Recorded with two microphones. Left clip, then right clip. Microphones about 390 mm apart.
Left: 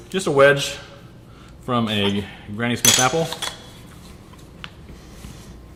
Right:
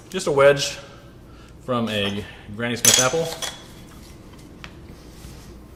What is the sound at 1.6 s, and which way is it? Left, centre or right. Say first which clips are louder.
Speech: left 2 dB; centre.